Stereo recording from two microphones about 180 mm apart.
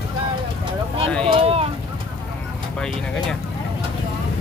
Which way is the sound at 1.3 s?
35° right (ahead or behind).